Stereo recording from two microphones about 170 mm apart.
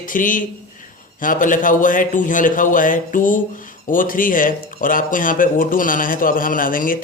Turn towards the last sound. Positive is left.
turn(degrees=55)  # may be behind; listen again after turning